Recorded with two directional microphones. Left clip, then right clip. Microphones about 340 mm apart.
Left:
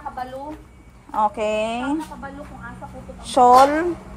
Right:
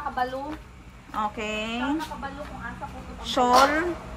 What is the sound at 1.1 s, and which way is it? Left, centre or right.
Speech, centre.